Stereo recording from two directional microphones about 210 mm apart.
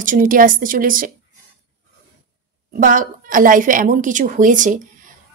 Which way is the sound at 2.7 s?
40° right (ahead or behind).